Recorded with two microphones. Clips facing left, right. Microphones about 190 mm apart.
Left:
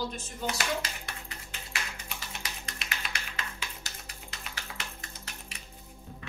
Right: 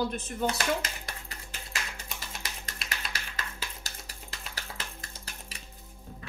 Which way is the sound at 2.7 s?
35° right (ahead or behind).